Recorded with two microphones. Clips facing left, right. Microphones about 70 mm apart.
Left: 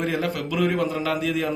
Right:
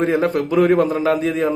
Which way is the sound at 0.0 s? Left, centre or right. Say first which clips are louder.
Right 8 dB; right.